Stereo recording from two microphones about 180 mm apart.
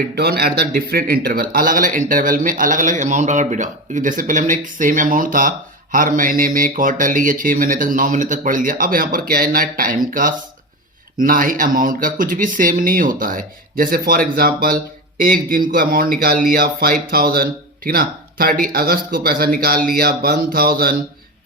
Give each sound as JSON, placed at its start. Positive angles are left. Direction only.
{"t": 0.2, "sound": "a man's voice", "side_deg": -60}